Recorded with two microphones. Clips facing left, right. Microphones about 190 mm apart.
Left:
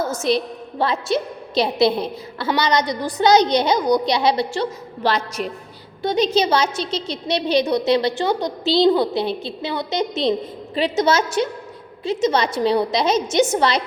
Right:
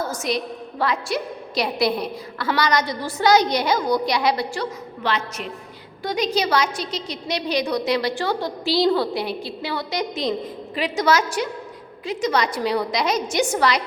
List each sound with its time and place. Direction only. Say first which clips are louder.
0.1 s a woman's voice: left 5 dB; 25° left (ahead or behind)
5.0 s a woman's voice: left 4 dB; 40° left (ahead or behind)
6.0 s a woman's voice: left 4 dB; 25° left (ahead or behind)